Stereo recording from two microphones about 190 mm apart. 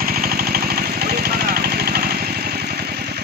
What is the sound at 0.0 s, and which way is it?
Vehicle, 50° right (ahead or behind).